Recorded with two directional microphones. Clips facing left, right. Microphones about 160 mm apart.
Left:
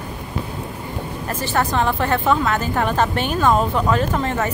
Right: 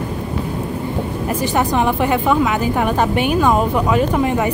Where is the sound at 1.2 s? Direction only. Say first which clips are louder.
Right 3 dB; 15° right (ahead or behind).